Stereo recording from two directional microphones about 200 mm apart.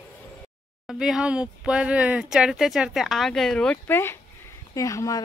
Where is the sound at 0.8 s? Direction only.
Centre (ahead or behind).